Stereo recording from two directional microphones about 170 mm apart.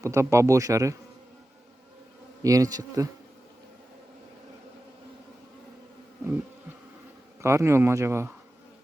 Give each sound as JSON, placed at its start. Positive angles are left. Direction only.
{"t": 0.0, "sound": "speech", "side_deg": -15}
{"t": 2.4, "sound": "bee", "side_deg": -20}
{"t": 7.4, "sound": "speech", "side_deg": -15}